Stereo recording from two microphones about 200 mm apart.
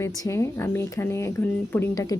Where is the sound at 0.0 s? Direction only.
15° left (ahead or behind).